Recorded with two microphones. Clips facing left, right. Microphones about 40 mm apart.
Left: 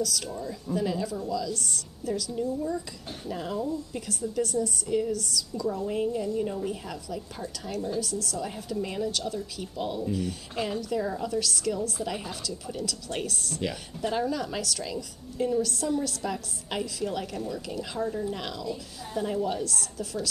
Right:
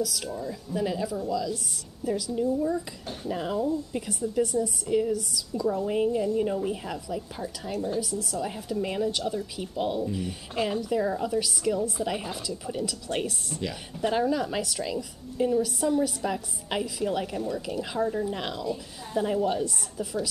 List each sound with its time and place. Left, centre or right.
0.0 s a woman's voice: centre